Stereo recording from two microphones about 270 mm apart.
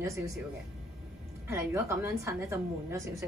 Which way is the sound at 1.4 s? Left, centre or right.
Centre.